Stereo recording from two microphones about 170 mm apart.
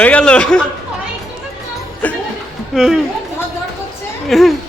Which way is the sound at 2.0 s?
10° left (ahead or behind).